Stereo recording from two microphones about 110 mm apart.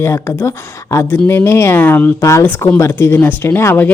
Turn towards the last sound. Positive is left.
turn(degrees=20)  # may be behind; listen again after turning